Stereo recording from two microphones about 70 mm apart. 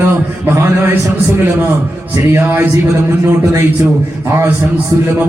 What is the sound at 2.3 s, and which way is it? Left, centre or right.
Speech, right.